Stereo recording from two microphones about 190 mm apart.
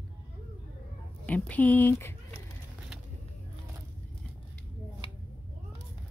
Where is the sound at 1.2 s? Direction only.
10° left (ahead or behind).